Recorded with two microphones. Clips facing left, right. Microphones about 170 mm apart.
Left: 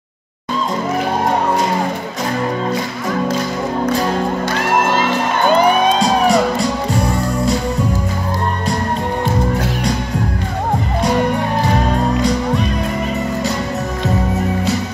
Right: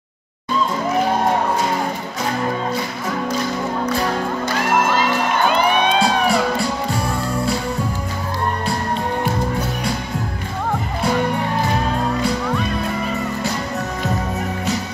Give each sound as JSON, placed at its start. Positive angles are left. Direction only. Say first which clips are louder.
{"t": 5.5, "sound": "music", "louder": "left 8 dB", "side_deg": 40}